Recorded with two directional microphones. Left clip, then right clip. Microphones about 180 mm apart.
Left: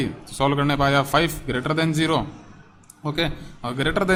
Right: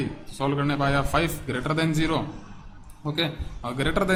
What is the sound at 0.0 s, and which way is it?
Speech, 30° left (ahead or behind).